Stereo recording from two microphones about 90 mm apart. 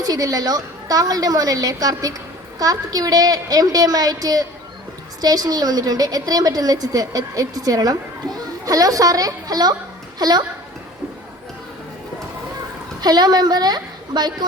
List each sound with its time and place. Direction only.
0.0 s a woman's voice: 45° right (ahead or behind)
13.0 s a woman's voice: 50° right (ahead or behind)